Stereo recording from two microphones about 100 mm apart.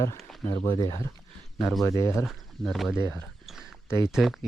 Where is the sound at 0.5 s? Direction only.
50° left (ahead or behind); by 2.2 s 30° left (ahead or behind).